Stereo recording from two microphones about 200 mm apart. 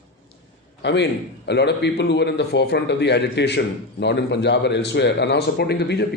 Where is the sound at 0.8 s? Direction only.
60° left (ahead or behind).